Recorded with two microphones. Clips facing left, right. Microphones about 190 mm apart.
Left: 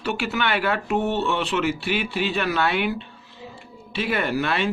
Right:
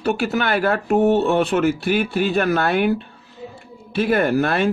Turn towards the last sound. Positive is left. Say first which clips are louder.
# right 6 dB
turn(degrees=-45)  # may be behind; listen again after turning